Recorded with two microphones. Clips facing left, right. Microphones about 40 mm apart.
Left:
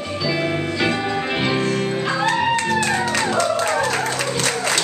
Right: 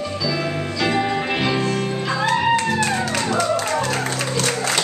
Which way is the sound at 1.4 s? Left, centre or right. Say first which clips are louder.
Left 1 dB; left.